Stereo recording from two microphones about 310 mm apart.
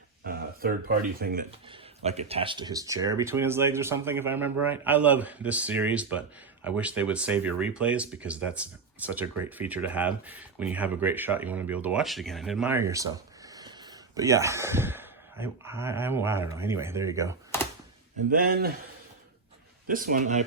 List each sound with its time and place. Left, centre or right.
0.3 s speech: right; by 17.3 s centre
18.3 s speech: right
19.9 s speech: right